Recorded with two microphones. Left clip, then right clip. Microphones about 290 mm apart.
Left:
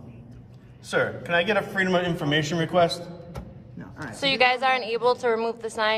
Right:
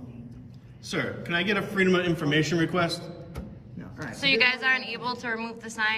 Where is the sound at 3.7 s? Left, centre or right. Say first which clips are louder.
Left 1 dB; left.